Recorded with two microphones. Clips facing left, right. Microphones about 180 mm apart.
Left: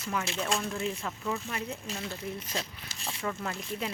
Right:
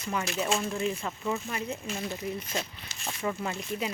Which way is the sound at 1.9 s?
15° right (ahead or behind).